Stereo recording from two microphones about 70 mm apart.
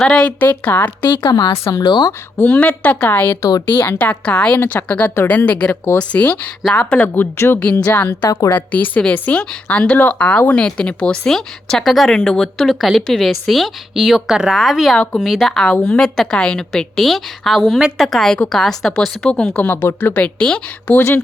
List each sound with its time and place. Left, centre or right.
0.0 s speech: centre
1.2 s speech: left
2.4 s speech: left
4.6 s a woman's voice: left
4.9 s speech: left
7.1 s a woman's voice: left
8.2 s a woman's voice: left
8.4 s a woman's voice: left; by 19.1 s centre
19.2 s speech: centre
19.5 s speech: left